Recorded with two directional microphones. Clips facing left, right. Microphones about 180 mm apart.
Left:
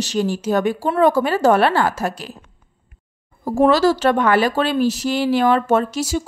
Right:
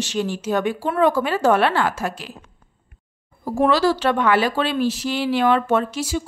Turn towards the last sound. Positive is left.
turn(degrees=40)  # may be behind; listen again after turning